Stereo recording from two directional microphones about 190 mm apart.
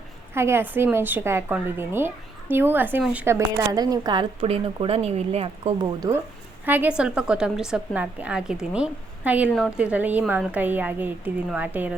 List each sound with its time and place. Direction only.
0.3 s a woman's voice: 15° right (ahead or behind); by 5.9 s 30° right (ahead or behind)
6.0 s a woman's voice: 15° right (ahead or behind)